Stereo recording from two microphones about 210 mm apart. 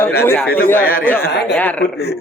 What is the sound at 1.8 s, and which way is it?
Speech, 50° left (ahead or behind).